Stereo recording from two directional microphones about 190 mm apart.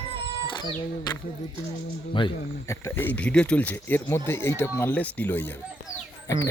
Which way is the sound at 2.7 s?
15° left (ahead or behind).